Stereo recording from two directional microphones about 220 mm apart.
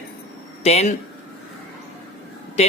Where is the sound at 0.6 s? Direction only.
30° left (ahead or behind).